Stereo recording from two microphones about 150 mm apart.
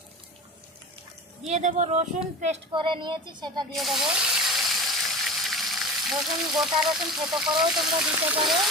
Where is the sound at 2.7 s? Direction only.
35° right (ahead or behind).